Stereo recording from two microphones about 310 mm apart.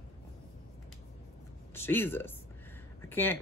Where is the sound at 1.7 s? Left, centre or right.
Centre.